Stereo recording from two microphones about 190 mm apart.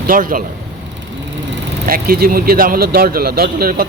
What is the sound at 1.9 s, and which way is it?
Speech, 50° right (ahead or behind).